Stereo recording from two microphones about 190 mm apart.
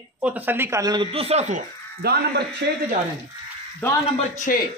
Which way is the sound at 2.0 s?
55° right (ahead or behind).